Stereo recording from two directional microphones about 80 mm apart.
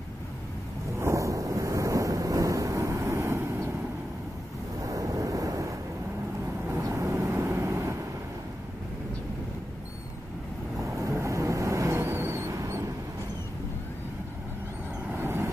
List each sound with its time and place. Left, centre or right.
0.9 s a sound: right
4.8 s waves: right
6.8 s vehicle: right
10.8 s vehicle: right
15.1 s vehicle: right